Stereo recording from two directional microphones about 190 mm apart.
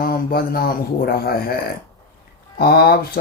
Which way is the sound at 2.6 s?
55° left (ahead or behind).